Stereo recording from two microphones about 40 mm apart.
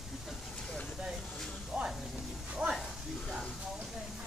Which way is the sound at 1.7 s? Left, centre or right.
Centre.